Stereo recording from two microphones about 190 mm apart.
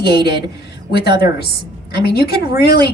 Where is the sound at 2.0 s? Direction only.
55° left (ahead or behind).